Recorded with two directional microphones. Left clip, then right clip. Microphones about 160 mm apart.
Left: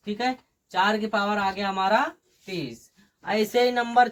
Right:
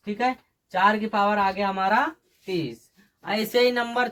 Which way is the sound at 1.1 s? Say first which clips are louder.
Right 3 dB; 15° right (ahead or behind).